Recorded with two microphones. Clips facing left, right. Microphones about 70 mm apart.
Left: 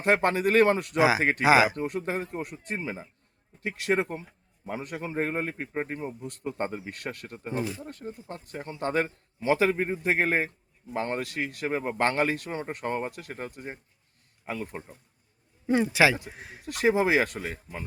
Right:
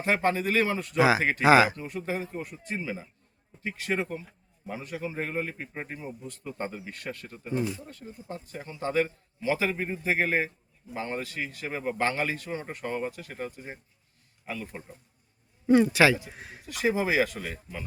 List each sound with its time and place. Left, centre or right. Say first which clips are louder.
0.0 s a man's voice: left 3 dB; left
0.9 s a man's voice: right 4 dB; centre
1.7 s a man's voice: left 3 dB; left
2.7 s speech: even; left
3.6 s a man's voice: left 4 dB; left
6.9 s a man's voice: left 1 dB; left
7.3 s a man's voice: right 2 dB; left
10.9 s a man's voice: left 3 dB; left
14.4 s speech: left 2 dB; left
15.6 s a man's voice: right 2 dB; centre
16.6 s a man's voice: left 3 dB; left
17.4 s speech: left 2 dB; left